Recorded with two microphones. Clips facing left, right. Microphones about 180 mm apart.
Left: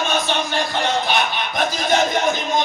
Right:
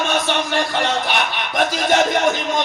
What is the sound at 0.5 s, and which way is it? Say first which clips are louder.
Speech: even; 75° right (ahead or behind).